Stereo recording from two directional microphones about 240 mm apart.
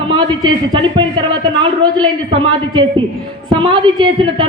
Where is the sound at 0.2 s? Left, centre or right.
Centre.